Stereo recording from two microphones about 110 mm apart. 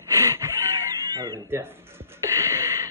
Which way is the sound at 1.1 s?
30° right (ahead or behind).